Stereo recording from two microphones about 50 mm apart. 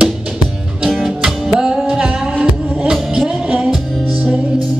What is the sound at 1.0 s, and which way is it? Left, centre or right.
Music, centre.